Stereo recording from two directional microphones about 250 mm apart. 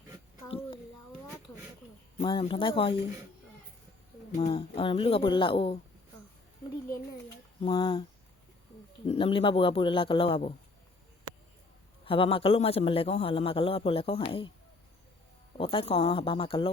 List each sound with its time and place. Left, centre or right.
0.4 s a sound: left
2.2 s a man's voice: centre
4.4 s a man's voice: left
7.6 s a man's voice: centre
9.0 s a man's voice: left
12.0 s a man's voice: left
15.5 s a man's voice: left